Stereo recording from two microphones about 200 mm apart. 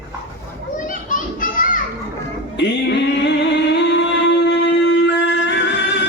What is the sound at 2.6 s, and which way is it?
Music, 60° left (ahead or behind).